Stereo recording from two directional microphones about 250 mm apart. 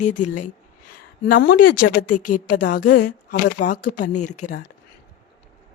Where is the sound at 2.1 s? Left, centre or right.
Left.